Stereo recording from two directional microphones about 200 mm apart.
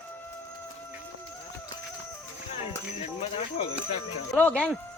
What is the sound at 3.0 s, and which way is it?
Speech, 30° left (ahead or behind).